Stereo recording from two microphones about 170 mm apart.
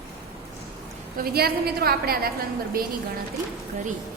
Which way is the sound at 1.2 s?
65° right (ahead or behind).